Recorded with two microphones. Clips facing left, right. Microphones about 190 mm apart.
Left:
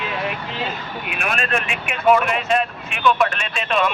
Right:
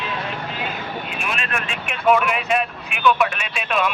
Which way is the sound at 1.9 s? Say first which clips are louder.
Left 1 dB; centre (ahead or behind).